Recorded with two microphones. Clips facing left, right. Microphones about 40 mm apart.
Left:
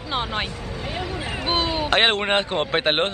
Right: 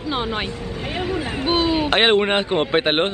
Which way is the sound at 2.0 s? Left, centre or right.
Centre.